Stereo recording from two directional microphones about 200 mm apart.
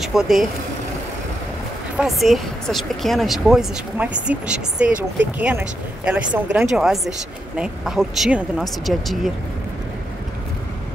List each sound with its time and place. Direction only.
0.0 s speech: centre (ahead or behind)
2.0 s speech: centre (ahead or behind)